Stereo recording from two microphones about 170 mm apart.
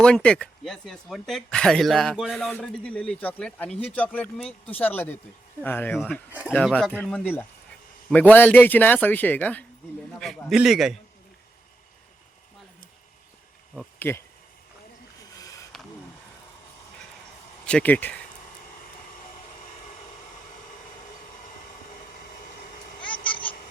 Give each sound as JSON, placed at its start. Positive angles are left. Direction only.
{"t": 0.0, "sound": "speech", "side_deg": 5}
{"t": 14.0, "sound": "speech", "side_deg": 15}
{"t": 15.4, "sound": "a sound", "side_deg": 20}
{"t": 17.7, "sound": "speech", "side_deg": 10}